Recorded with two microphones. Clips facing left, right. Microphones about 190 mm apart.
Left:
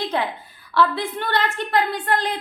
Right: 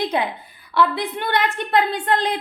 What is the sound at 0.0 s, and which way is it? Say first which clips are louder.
A woman's voice: right 2 dB; 20° right (ahead or behind).